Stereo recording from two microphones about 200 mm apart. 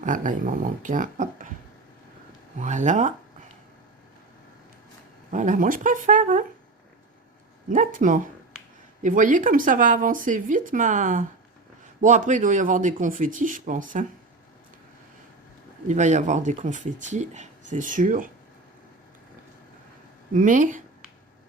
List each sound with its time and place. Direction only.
0.0 s speech: 40° right (ahead or behind)
2.6 s speech: 35° right (ahead or behind)
5.3 s speech: 40° right (ahead or behind)
7.7 s speech: 40° right (ahead or behind)
15.9 s speech: 35° right (ahead or behind)
20.3 s speech: 40° right (ahead or behind)